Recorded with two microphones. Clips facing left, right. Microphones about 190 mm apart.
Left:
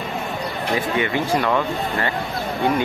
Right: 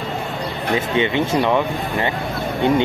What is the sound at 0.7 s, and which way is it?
Speech, 25° right (ahead or behind).